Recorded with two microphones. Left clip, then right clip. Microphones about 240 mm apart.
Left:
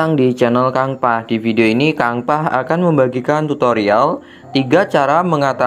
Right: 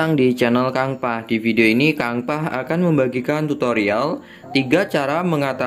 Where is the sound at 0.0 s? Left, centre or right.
Centre.